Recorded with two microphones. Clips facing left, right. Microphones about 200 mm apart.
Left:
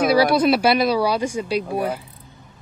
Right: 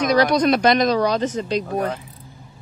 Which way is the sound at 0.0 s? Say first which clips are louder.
Left 1 dB; 10° left (ahead or behind).